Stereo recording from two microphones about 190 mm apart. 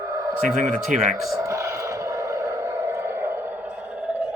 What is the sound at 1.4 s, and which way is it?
Vehicle, 15° right (ahead or behind).